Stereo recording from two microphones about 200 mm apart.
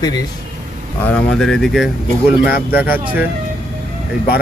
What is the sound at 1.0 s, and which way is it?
A man's voice, 5° left (ahead or behind).